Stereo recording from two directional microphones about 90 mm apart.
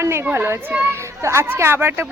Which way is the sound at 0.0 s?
30° right (ahead or behind).